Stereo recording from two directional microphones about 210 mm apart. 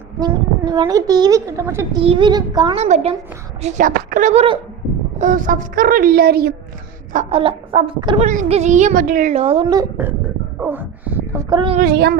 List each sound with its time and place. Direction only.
0.2 s a woman's voice: 20° right (ahead or behind)
5.2 s speech: 40° right (ahead or behind)
7.1 s a woman's voice: 35° right (ahead or behind)
10.0 s speech: 10° right (ahead or behind)
11.8 s speech: 50° right (ahead or behind)